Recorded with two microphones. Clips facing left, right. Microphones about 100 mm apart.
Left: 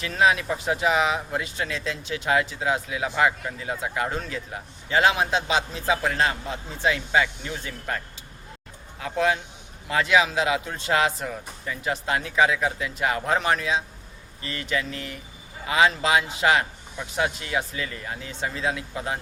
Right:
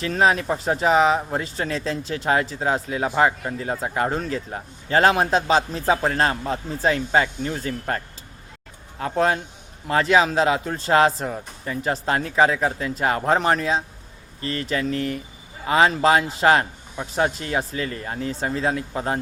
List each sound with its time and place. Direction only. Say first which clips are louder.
0.0 s speech: right 2 dB; 35° right (ahead or behind)